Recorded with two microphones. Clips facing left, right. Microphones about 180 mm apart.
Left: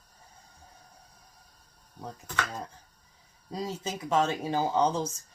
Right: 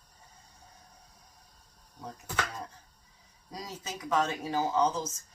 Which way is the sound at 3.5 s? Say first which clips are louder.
Left 7 dB; 30° left (ahead or behind).